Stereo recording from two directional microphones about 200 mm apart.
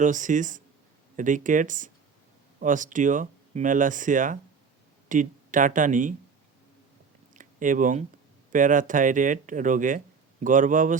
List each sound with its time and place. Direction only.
0.0 s speech: 40° right (ahead or behind)
7.3 s a sound: 40° right (ahead or behind)
8.5 s speech: 40° right (ahead or behind)